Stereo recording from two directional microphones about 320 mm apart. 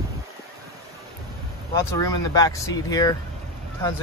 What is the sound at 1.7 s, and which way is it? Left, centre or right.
Speech, centre.